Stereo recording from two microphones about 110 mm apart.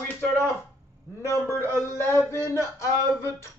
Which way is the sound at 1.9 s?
20° left (ahead or behind).